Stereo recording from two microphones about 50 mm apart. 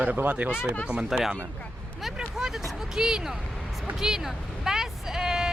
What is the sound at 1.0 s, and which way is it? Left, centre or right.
Speech, centre.